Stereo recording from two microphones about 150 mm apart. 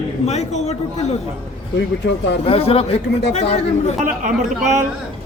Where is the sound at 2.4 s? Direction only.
40° left (ahead or behind).